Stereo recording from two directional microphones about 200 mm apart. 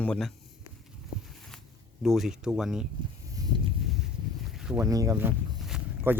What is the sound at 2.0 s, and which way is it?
Speech, centre (ahead or behind).